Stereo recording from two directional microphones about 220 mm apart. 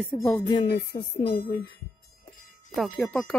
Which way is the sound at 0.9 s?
25° left (ahead or behind).